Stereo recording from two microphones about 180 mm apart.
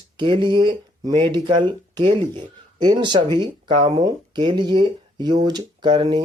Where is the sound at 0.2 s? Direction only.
25° right (ahead or behind).